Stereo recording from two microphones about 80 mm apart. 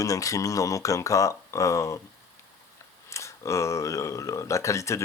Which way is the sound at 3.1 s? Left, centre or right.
Left.